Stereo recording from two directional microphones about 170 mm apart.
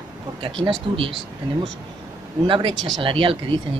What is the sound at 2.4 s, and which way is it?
Speech, 30° right (ahead or behind).